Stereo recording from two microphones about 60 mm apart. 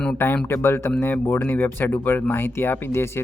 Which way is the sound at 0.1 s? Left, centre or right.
Left.